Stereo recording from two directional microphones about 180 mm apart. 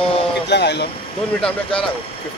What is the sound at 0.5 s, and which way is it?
Speech, 70° left (ahead or behind).